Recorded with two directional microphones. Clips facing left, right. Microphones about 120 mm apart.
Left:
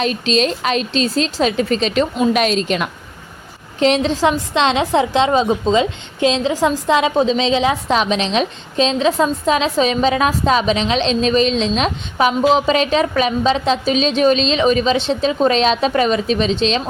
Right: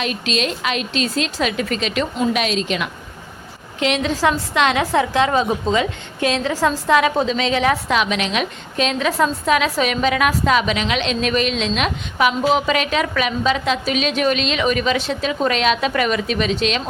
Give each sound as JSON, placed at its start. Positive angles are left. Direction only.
{"t": 0.0, "sound": "a woman's voice", "side_deg": 35}
{"t": 2.3, "sound": "a woman's voice", "side_deg": 45}
{"t": 7.9, "sound": "a woman's voice", "side_deg": 30}